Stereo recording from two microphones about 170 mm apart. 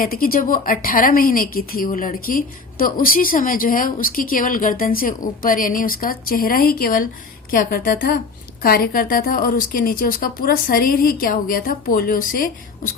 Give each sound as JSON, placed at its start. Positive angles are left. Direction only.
{"t": 0.0, "sound": "a woman's voice", "side_deg": 60}